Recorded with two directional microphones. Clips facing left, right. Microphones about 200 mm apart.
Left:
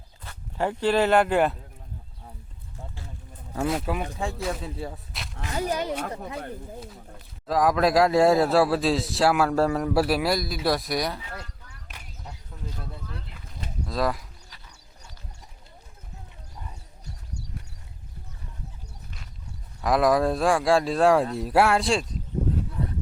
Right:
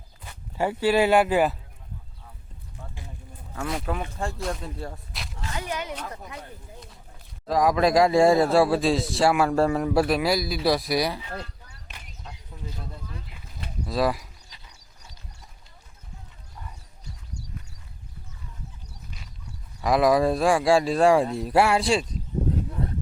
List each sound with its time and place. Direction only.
0.3 s speech: 10° right (ahead or behind)
3.7 s a man's voice: 5° left (ahead or behind)
5.5 s speech: 35° left (ahead or behind)
7.4 s a man's voice: centre (ahead or behind)
11.3 s a sound: 30° right (ahead or behind)
13.8 s a man's voice: 5° right (ahead or behind)
19.8 s a man's voice: centre (ahead or behind)